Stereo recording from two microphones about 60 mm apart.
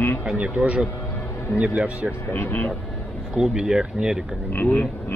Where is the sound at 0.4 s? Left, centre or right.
Centre.